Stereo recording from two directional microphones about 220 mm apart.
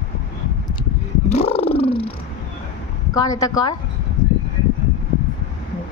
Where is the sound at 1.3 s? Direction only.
25° left (ahead or behind).